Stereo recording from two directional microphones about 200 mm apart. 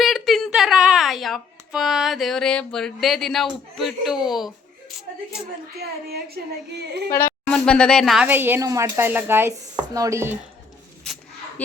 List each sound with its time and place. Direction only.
0.0 s speech: centre (ahead or behind)
5.8 s speech: 50° right (ahead or behind)
7.4 s speech: 5° left (ahead or behind); by 10.3 s 15° right (ahead or behind)
11.0 s a sound: 5° left (ahead or behind)